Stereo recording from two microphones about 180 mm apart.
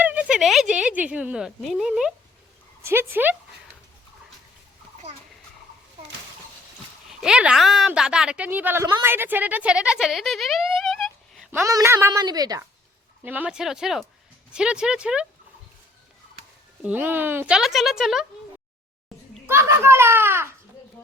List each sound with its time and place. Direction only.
0.0 s a woman's voice: 10° right (ahead or behind)
7.1 s a woman's voice: 5° right (ahead or behind)
11.5 s a woman's voice: 15° right (ahead or behind)
13.2 s a woman's voice: 10° right (ahead or behind)
16.8 s a woman's voice: 10° right (ahead or behind)
19.5 s a woman's voice: 15° right (ahead or behind)